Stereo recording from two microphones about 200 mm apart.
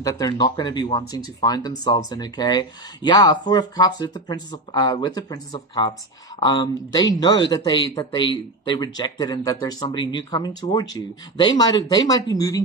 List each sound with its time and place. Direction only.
0.0 s speech: 15° left (ahead or behind)